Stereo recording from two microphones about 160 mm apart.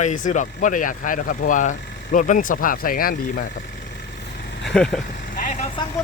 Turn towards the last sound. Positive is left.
turn(degrees=50)  # may be behind; listen again after turning